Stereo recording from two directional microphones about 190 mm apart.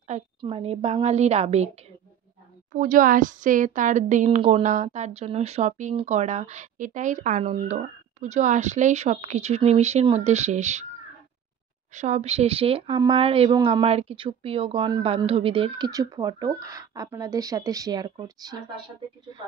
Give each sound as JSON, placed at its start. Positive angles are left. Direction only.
{"t": 0.4, "sound": "speech", "side_deg": -30}
{"t": 2.7, "sound": "speech", "side_deg": -45}
{"t": 11.9, "sound": "speech", "side_deg": -40}